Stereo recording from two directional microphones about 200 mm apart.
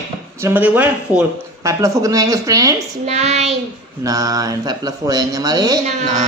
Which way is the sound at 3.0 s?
35° right (ahead or behind).